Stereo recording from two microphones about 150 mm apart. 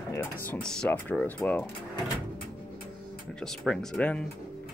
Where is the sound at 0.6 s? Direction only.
5° left (ahead or behind).